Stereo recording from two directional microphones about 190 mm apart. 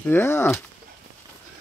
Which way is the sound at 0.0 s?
10° left (ahead or behind).